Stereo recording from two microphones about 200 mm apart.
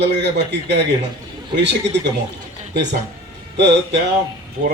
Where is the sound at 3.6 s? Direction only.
60° right (ahead or behind).